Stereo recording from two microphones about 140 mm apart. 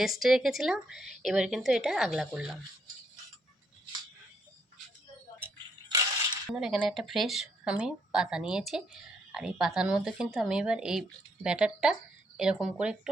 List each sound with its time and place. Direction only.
0.0 s speech: centre (ahead or behind)
5.9 s a sound: 25° right (ahead or behind)
6.6 s speech: 5° right (ahead or behind)